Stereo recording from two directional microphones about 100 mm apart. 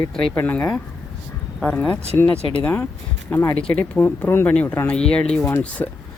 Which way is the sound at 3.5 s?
10° left (ahead or behind).